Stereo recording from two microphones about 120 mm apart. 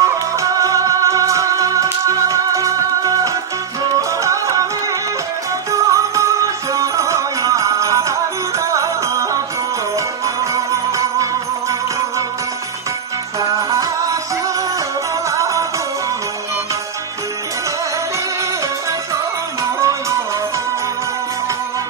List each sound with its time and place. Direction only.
0.0 s music: 25° right (ahead or behind)
4.2 s music: 25° right (ahead or behind)
5.7 s music: 25° right (ahead or behind)
13.4 s music: 25° right (ahead or behind)
15.3 s music: 25° right (ahead or behind)
19.8 s music: 25° right (ahead or behind)